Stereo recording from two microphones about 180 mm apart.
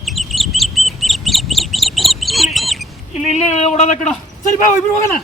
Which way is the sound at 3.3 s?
40° left (ahead or behind).